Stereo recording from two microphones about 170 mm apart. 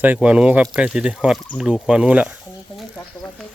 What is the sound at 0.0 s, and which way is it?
Speech, 10° right (ahead or behind).